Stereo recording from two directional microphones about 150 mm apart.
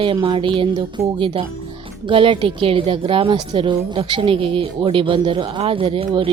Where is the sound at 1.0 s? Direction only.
20° right (ahead or behind).